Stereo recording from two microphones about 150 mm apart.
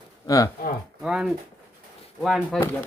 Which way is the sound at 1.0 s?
5° right (ahead or behind).